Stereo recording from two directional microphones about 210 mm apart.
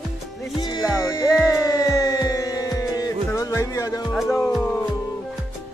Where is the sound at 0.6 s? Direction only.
20° left (ahead or behind).